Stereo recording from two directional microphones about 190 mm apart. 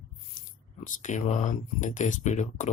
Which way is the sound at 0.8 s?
40° left (ahead or behind).